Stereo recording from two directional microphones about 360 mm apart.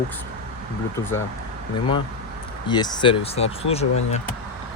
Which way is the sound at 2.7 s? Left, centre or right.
Centre.